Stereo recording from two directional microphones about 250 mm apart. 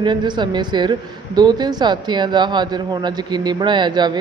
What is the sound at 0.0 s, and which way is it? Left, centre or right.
A man's voice, centre.